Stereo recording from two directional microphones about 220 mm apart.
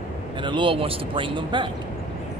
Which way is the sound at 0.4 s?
20° right (ahead or behind).